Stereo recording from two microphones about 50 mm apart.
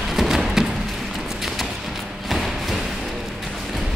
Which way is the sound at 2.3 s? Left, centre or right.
Centre.